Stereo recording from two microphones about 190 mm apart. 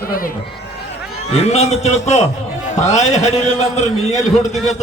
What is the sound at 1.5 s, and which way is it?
A man's voice, 35° left (ahead or behind).